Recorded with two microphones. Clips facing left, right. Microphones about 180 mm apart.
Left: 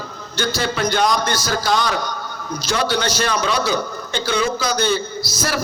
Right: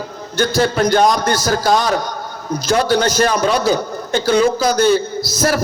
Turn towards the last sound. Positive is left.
turn(degrees=-45)  # may be behind; listen again after turning